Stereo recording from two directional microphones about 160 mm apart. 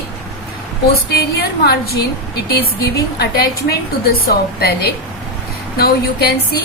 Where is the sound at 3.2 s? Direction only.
80° left.